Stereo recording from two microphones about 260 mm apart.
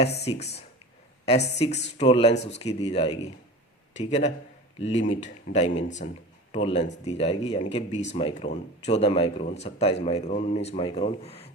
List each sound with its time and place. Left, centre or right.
0.0 s speech: left